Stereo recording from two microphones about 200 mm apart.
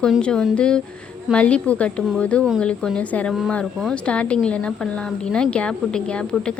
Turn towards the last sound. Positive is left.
turn(degrees=5)  # may be behind; listen again after turning